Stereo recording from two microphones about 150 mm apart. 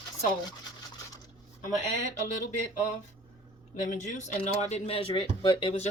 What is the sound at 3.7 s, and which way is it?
Speech, 50° left (ahead or behind).